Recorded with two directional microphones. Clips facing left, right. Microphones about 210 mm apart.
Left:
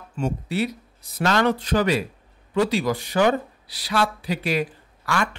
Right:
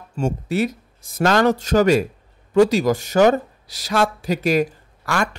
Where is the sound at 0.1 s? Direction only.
45° right (ahead or behind).